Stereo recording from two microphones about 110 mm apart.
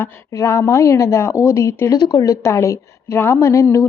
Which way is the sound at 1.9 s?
40° left (ahead or behind).